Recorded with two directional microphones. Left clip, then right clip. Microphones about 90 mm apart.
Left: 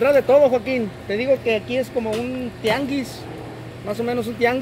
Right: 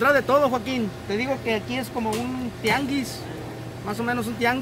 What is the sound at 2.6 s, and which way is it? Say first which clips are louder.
Speech: left 2 dB; 30° right (ahead or behind).